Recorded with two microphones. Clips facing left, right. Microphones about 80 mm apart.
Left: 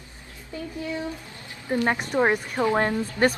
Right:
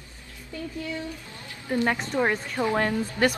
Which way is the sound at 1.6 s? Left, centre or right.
Left.